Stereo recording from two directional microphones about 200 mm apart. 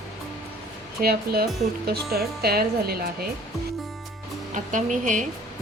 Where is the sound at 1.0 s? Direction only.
50° right (ahead or behind).